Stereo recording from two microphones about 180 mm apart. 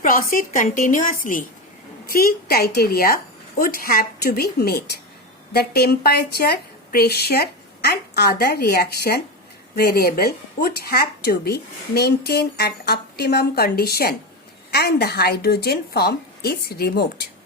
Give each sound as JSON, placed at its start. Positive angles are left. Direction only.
{"t": 0.0, "sound": "a woman's voice", "side_deg": 55}